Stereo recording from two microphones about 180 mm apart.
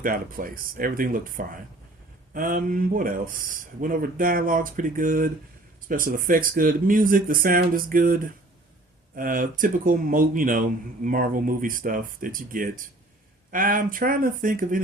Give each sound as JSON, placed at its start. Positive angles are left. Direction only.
{"t": 0.0, "sound": "speech", "side_deg": -50}